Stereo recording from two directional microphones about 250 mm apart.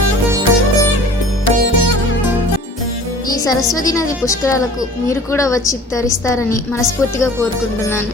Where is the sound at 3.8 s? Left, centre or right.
Centre.